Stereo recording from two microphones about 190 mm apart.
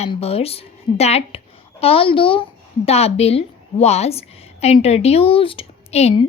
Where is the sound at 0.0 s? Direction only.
30° left (ahead or behind).